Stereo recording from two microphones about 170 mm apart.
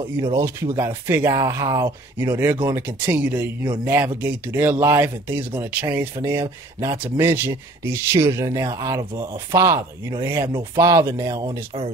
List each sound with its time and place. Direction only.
0.0 s speech: 20° right (ahead or behind)